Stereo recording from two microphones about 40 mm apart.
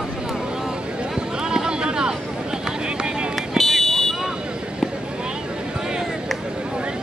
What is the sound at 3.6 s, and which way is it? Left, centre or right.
Fire alarm, centre.